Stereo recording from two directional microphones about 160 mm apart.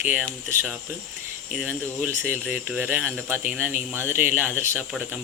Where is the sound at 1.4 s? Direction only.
5° right (ahead or behind).